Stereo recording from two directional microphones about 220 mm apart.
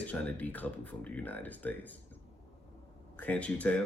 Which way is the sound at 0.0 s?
5° left (ahead or behind).